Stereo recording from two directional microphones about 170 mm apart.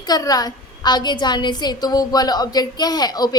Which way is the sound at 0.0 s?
20° left (ahead or behind).